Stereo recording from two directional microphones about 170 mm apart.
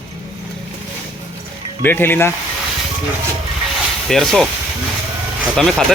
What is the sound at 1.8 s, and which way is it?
Speech, 10° left (ahead or behind).